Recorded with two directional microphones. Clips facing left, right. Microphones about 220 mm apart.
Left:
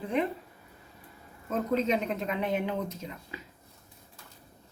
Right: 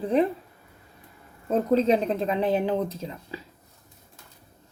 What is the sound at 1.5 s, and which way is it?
A woman's voice, 35° right (ahead or behind).